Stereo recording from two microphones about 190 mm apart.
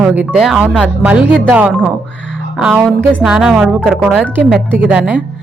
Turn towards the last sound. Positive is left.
turn(degrees=-5)  # may be behind; listen again after turning